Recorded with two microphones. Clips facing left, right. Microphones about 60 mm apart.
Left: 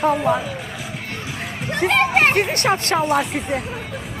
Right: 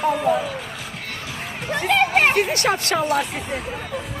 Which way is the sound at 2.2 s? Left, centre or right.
Left.